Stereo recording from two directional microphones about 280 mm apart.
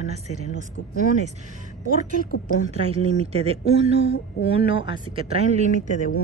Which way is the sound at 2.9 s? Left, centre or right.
Right.